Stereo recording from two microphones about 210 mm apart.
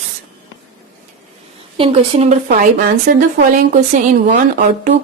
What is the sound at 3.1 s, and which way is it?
A woman's voice, 40° right (ahead or behind).